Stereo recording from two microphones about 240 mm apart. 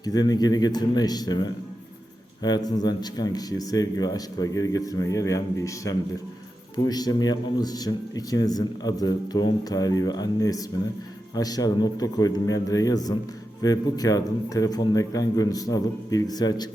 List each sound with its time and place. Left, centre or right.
0.0 s a man's voice: centre